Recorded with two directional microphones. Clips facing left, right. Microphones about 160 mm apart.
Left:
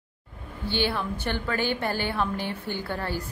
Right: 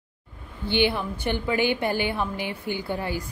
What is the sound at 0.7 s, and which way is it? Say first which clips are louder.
A woman's voice: right 4 dB; 15° right (ahead or behind).